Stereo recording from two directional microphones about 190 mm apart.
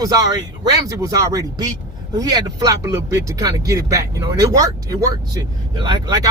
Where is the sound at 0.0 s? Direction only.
20° right (ahead or behind).